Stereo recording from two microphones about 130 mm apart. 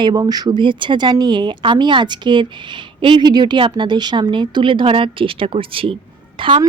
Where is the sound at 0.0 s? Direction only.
30° right (ahead or behind).